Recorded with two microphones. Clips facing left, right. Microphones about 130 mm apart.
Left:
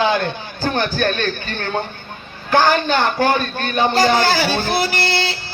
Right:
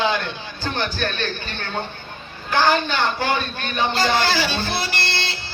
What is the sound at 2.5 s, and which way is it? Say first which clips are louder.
Speech: left 4 dB; 45° left (ahead or behind).